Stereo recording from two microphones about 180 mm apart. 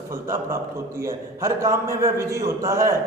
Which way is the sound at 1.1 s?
15° right (ahead or behind).